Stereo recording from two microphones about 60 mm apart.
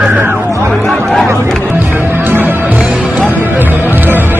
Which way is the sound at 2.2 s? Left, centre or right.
Right.